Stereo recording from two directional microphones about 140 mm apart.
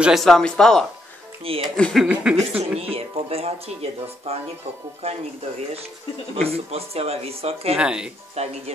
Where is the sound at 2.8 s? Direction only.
45° right (ahead or behind).